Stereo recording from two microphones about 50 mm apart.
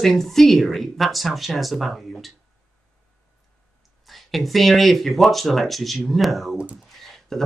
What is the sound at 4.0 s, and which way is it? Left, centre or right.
Speech, centre.